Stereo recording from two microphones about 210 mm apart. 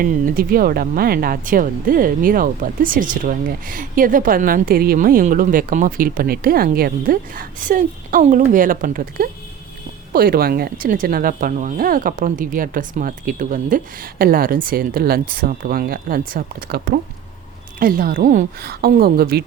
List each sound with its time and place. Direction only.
0.0 s speech: 40° right (ahead or behind)